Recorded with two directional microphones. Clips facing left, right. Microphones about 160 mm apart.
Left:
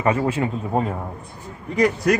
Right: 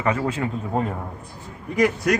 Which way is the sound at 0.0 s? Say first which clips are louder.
Left 3 dB; 20° left (ahead or behind).